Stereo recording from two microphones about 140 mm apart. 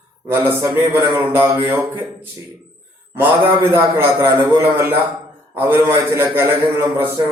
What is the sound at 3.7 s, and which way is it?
A man's voice, 15° right (ahead or behind).